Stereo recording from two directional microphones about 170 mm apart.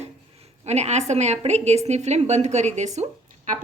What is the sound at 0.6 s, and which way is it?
A woman's voice, 40° right (ahead or behind).